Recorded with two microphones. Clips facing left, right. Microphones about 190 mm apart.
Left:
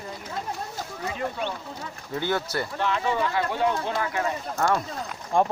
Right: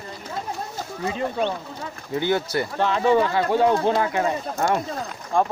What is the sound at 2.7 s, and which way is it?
Speech, 35° right (ahead or behind).